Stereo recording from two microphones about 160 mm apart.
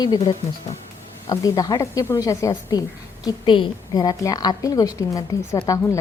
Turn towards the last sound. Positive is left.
turn(degrees=20)  # may be behind; listen again after turning